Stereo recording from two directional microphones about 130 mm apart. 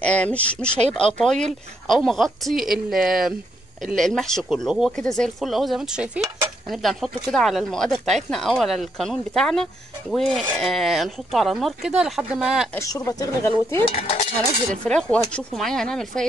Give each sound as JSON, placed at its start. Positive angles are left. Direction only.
{"t": 0.0, "sound": "speech", "side_deg": 10}
{"t": 12.7, "sound": "speech", "side_deg": 25}
{"t": 13.8, "sound": "cutlery", "side_deg": 50}
{"t": 14.9, "sound": "speech", "side_deg": 5}